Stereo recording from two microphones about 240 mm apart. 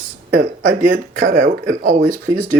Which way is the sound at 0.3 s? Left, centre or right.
Right.